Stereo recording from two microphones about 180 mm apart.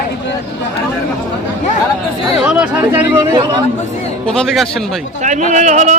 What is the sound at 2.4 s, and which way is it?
Speech, 5° right (ahead or behind).